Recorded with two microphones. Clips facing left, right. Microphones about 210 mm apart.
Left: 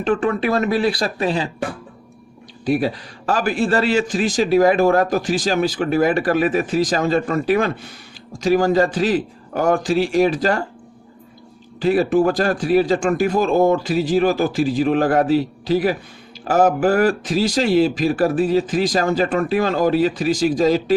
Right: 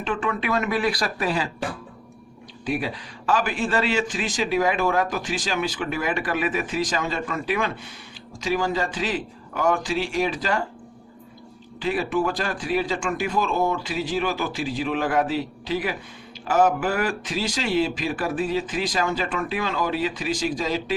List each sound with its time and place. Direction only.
0.0 s a man's voice: 40° left (ahead or behind)
2.6 s a man's voice: 40° left (ahead or behind)
11.8 s a man's voice: 40° left (ahead or behind)